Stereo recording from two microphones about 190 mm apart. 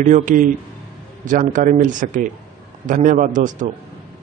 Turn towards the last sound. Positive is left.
turn(degrees=-40)  # may be behind; listen again after turning